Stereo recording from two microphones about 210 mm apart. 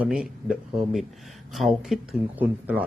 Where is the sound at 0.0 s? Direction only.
5° right (ahead or behind).